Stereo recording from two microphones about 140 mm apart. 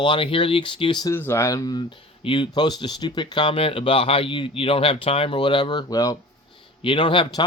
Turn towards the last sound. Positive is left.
turn(degrees=35)  # may be behind; listen again after turning